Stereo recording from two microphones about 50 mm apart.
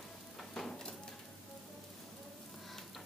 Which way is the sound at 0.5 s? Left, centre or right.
Centre.